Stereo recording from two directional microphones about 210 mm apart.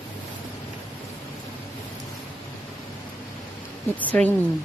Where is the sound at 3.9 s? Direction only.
5° left (ahead or behind).